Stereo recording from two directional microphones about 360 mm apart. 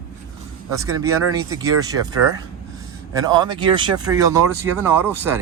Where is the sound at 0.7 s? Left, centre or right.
Centre.